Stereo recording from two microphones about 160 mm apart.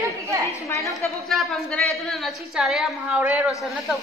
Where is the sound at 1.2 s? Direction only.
Centre (ahead or behind).